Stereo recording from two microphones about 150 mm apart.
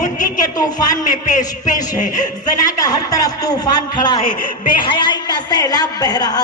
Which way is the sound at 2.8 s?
25° left (ahead or behind).